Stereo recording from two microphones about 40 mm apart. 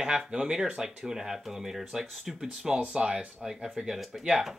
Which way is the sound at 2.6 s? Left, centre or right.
Centre.